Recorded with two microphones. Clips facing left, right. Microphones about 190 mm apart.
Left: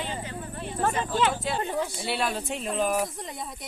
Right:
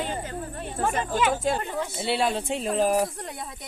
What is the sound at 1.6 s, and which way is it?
Speech, 20° left (ahead or behind).